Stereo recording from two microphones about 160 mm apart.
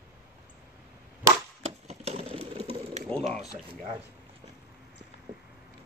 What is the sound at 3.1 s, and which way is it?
Speech, 10° left (ahead or behind).